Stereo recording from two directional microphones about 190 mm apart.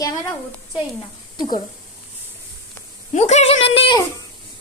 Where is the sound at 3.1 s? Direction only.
35° left (ahead or behind).